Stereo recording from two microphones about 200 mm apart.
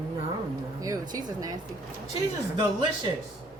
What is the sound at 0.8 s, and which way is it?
Speech, 20° right (ahead or behind).